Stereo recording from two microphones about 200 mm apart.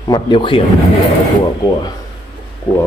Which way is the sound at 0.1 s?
25° left (ahead or behind).